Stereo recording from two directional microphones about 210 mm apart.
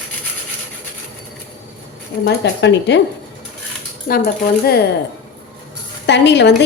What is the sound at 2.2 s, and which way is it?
Speech, 55° left (ahead or behind).